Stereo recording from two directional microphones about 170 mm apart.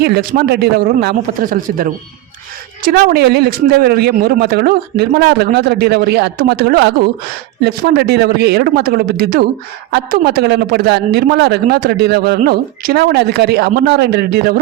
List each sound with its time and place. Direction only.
0.0 s a man's voice: 65° right (ahead or behind)
12.4 s speech: 60° right (ahead or behind)